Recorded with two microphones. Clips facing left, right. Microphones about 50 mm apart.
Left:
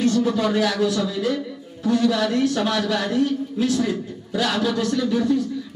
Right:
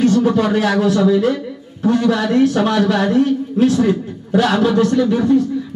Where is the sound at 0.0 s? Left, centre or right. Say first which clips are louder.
Right 6 dB; right.